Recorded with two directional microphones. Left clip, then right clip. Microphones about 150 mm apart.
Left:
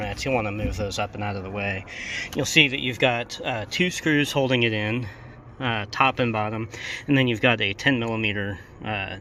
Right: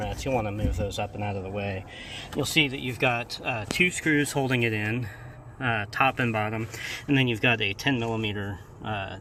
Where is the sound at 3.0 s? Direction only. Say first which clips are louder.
Left 2 dB; 30° left (ahead or behind).